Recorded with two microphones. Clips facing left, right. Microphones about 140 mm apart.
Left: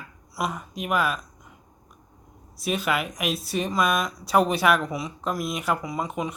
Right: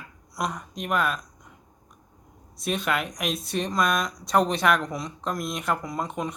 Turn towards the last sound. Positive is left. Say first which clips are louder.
# left 1 dB
turn(degrees=0)  # may be behind; listen again after turning